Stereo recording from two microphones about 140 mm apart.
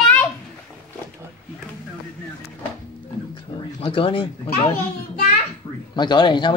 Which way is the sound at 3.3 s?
35° left (ahead or behind).